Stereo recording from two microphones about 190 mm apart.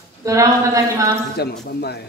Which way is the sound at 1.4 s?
55° left (ahead or behind).